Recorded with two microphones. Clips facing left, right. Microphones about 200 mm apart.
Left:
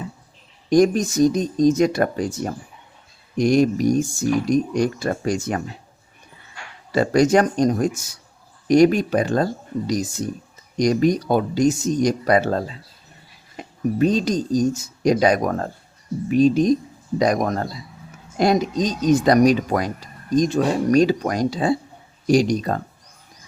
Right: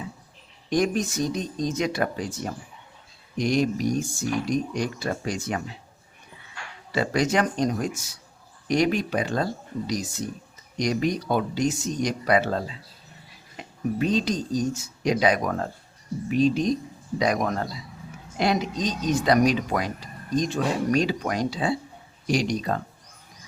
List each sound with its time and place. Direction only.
0.7 s speech: 40° left (ahead or behind)
6.9 s speech: 45° left (ahead or behind)